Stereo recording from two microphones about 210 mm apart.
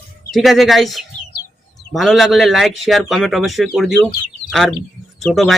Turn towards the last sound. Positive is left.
turn(degrees=0)  # may be behind; listen again after turning